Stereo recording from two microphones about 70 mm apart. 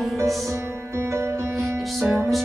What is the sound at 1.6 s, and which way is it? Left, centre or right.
Music, centre.